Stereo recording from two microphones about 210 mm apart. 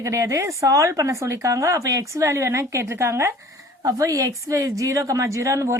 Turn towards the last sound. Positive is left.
turn(degrees=-15)  # may be behind; listen again after turning